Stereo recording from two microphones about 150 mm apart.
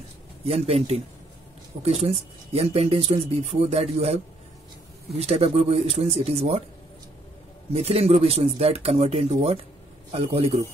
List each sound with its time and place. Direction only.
0.5 s speech: 45° right (ahead or behind)
5.2 s speech: 45° right (ahead or behind)
7.7 s a man's voice: 45° right (ahead or behind)